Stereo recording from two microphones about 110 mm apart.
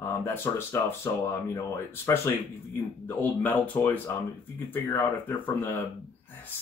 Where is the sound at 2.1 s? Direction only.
20° left (ahead or behind).